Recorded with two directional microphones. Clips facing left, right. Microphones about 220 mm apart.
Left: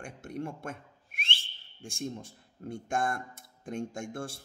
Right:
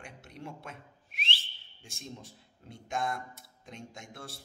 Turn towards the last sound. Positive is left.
turn(degrees=50)  # may be behind; listen again after turning